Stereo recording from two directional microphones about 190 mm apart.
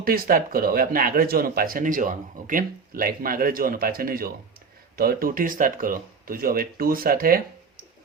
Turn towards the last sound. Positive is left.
turn(degrees=-50)  # may be behind; listen again after turning